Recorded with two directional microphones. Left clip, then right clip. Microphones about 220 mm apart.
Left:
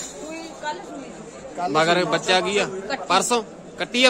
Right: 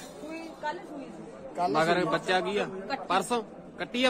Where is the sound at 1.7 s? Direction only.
5° left (ahead or behind).